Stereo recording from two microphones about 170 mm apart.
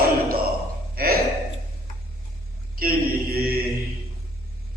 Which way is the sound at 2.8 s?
60° right (ahead or behind).